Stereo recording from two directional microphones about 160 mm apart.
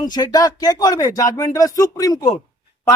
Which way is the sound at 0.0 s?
25° left (ahead or behind).